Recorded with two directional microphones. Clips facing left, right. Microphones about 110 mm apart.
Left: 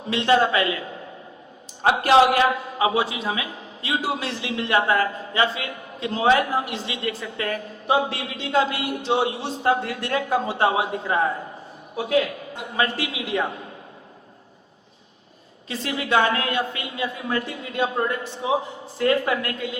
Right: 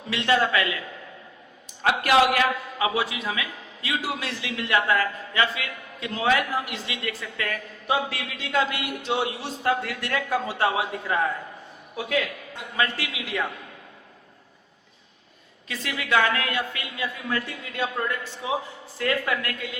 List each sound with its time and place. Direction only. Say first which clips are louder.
0.0 s a man's voice: left 4 dB; 25° left (ahead or behind)
15.7 s a man's voice: left 2 dB; 30° left (ahead or behind)